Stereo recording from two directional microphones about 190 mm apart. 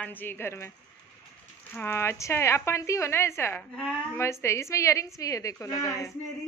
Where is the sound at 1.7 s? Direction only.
10° left (ahead or behind).